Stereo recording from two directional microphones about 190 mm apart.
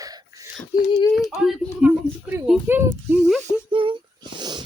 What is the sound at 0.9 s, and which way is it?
Speech, 25° left (ahead or behind).